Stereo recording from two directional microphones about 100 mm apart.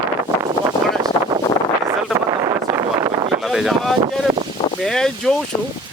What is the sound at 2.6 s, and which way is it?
Vehicle, 35° right (ahead or behind).